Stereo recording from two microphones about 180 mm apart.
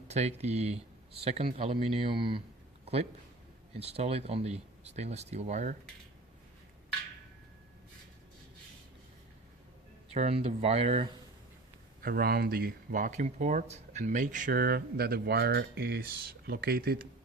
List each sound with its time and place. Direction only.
0.1 s speech: 40° right (ahead or behind)
10.2 s speech: 35° right (ahead or behind)
12.0 s speech: 55° right (ahead or behind)